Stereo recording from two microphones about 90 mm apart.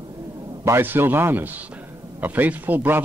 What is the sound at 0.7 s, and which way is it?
Speech, 25° right (ahead or behind).